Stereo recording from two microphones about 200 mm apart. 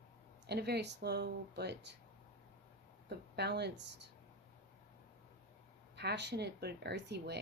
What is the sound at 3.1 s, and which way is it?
Speech, 55° right (ahead or behind).